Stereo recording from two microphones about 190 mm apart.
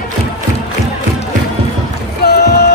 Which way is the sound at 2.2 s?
55° left (ahead or behind).